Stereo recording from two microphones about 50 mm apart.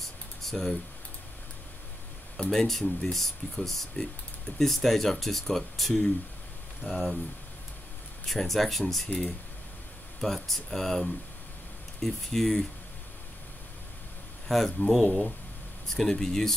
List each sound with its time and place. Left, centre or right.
0.4 s speech: centre
2.5 s speech: centre
4.0 s speech: left
4.6 s speech: centre
8.3 s speech: centre
10.2 s speech: centre
14.5 s speech: centre
15.0 s speech: centre